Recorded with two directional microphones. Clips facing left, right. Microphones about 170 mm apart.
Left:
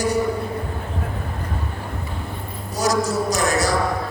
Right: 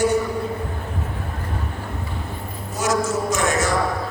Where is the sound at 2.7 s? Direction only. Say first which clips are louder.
Left 1 dB; 35° left (ahead or behind).